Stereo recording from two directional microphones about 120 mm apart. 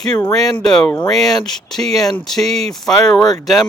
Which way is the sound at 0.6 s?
5° left (ahead or behind).